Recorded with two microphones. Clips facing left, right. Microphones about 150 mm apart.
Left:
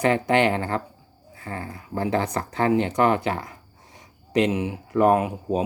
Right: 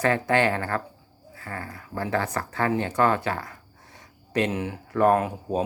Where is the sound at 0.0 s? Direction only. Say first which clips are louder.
Left 2 dB; 20° left (ahead or behind).